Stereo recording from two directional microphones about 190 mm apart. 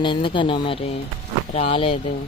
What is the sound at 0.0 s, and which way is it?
Speech, 25° left (ahead or behind).